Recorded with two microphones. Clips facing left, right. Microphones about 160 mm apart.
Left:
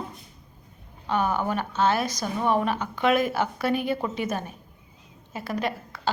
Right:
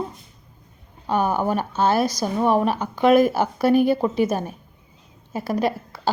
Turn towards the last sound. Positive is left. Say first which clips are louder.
# right 5 dB
turn(degrees=-35)  # may be behind; listen again after turning